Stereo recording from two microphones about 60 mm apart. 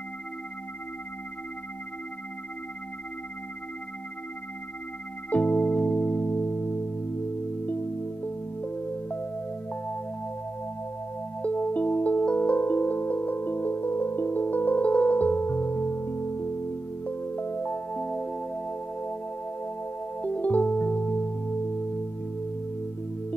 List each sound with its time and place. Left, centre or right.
5.3 s music: left
11.4 s music: left
20.2 s music: left